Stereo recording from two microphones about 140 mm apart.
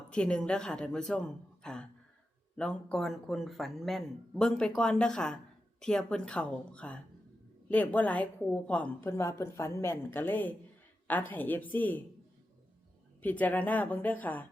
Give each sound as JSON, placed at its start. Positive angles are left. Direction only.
{"t": 0.1, "sound": "a woman's voice", "side_deg": 5}
{"t": 13.2, "sound": "a woman's voice", "side_deg": 10}